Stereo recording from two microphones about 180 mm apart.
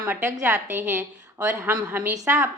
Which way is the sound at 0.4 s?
10° right (ahead or behind).